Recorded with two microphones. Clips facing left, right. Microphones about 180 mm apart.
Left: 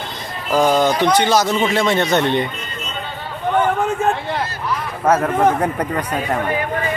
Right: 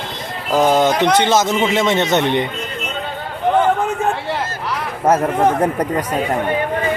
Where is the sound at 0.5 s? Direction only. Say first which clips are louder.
Right 1 dB; 20° right (ahead or behind).